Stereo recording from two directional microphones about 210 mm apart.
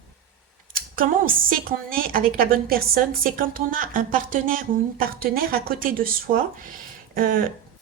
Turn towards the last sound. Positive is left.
turn(degrees=-45)  # may be behind; listen again after turning